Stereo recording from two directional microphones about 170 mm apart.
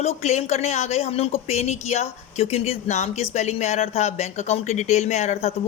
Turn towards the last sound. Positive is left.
turn(degrees=40)  # may be behind; listen again after turning